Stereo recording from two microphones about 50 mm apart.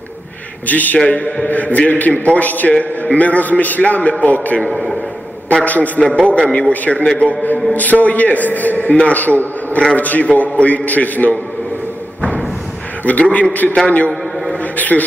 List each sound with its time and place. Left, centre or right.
0.7 s a man's voice: left
4.7 s a man's voice: centre
5.6 s a man's voice: left
6.0 s a man's voice: centre; by 11.3 s left
13.1 s a man's voice: left
14.1 s a sound: centre
14.6 s a sound: left